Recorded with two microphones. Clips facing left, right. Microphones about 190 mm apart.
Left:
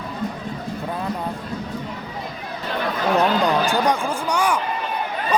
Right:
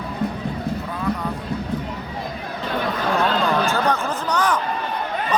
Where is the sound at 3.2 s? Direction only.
15° left (ahead or behind).